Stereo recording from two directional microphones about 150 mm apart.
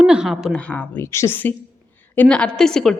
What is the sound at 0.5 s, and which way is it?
A woman's voice, 10° left (ahead or behind).